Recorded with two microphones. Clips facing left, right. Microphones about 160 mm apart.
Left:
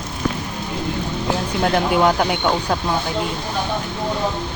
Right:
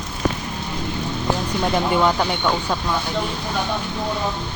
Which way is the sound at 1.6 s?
Centre (ahead or behind).